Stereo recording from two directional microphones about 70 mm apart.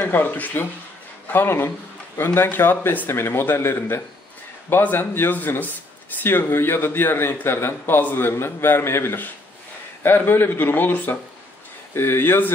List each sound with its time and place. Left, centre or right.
0.0 s a man's voice: left